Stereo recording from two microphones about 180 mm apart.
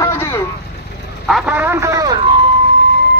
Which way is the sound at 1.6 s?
15° right (ahead or behind).